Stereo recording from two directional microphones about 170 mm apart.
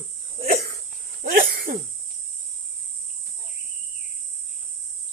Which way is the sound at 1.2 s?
60° right (ahead or behind).